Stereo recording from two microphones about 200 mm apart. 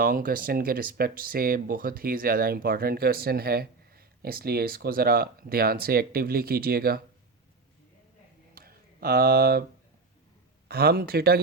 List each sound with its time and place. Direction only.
0.0 s speech: 45° right (ahead or behind)
8.5 s a sound: 50° right (ahead or behind)
10.7 s speech: 50° right (ahead or behind)